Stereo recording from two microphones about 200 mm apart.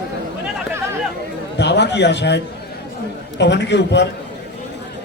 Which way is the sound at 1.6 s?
60° left (ahead or behind).